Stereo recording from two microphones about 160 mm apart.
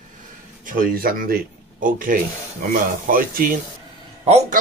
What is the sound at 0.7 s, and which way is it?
A man's voice, 65° right (ahead or behind).